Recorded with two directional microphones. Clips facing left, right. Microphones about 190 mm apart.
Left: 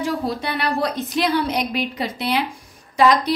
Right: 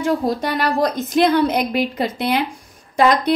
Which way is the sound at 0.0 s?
40° right (ahead or behind).